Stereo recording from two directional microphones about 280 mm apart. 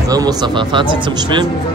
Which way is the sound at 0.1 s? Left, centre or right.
Centre.